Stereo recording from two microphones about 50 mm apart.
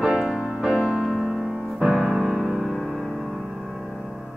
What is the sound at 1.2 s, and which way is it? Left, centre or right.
Piano, centre.